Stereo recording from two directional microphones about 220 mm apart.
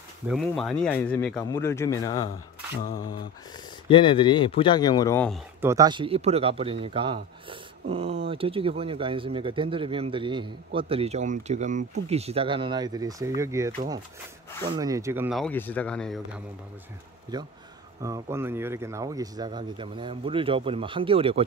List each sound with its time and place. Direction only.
0.3 s a man's voice: centre (ahead or behind)
5.6 s speech: 15° right (ahead or behind)
15.3 s speech: 5° left (ahead or behind)
18.0 s speech: 15° right (ahead or behind)